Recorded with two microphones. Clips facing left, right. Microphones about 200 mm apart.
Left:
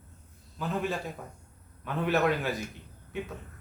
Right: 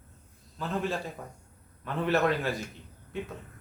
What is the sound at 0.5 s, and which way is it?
A man's voice, centre (ahead or behind).